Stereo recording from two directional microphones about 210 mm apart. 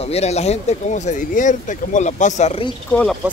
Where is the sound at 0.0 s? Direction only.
30° left (ahead or behind).